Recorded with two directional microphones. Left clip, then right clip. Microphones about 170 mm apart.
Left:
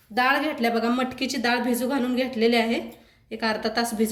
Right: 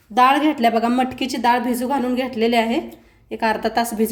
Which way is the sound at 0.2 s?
55° right (ahead or behind).